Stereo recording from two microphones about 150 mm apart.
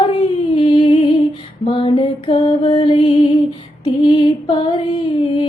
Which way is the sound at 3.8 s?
30° left (ahead or behind).